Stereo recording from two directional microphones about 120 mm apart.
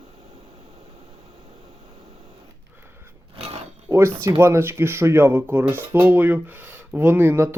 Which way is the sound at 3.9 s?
20° right (ahead or behind).